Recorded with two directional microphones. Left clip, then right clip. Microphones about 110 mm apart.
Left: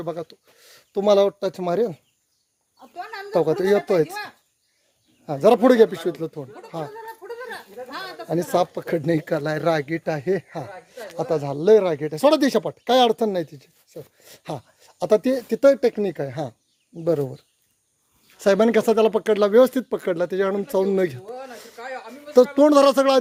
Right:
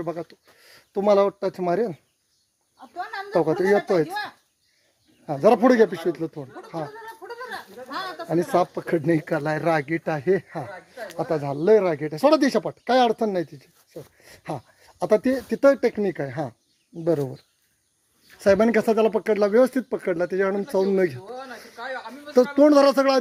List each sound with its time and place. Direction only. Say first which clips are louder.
0.0 s speech: left 1 dB; 20° left (ahead or behind)
2.9 s a sound: right 2 dB; 50° left (ahead or behind)
3.7 s speech: left 1 dB; 45° left (ahead or behind)
5.2 s speech: left 2 dB; 20° left (ahead or behind)
6.7 s snicker: left 1 dB; 60° left (ahead or behind)
7.3 s a sound: right 1 dB; 35° left (ahead or behind)
8.5 s speech: left 2 dB; 20° left (ahead or behind)
18.3 s speech: left 1 dB; 30° left (ahead or behind)
21.2 s speech: left 1 dB; 90° left
21.8 s a sound: right 1 dB; 90° left
22.5 s speech: left 1 dB; 25° left (ahead or behind)